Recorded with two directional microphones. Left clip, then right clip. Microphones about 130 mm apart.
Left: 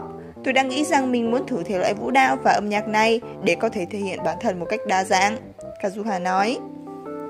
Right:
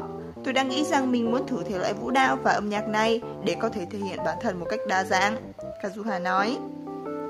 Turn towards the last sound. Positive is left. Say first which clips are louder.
# left 4 dB
turn(degrees=20)  # may be behind; listen again after turning